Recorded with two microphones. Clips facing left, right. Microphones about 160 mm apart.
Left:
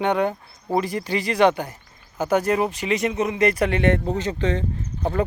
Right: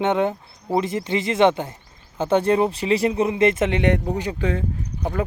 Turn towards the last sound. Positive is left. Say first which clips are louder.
# left 2 dB
turn(degrees=-10)  # may be behind; listen again after turning